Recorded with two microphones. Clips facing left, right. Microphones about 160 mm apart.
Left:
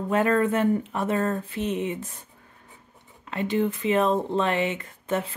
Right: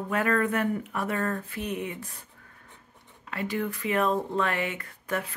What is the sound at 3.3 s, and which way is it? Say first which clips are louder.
Speech: left 6 dB; 25° left (ahead or behind).